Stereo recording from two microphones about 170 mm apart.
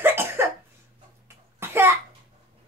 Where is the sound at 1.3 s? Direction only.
15° right (ahead or behind).